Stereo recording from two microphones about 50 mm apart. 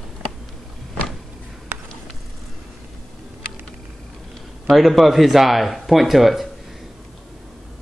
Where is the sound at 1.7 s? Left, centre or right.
Right.